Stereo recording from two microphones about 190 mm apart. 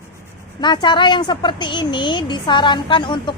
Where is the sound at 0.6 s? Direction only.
25° left (ahead or behind).